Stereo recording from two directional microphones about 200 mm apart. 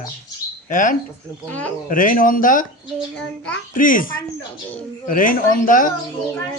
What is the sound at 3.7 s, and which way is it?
Speech, 45° left (ahead or behind).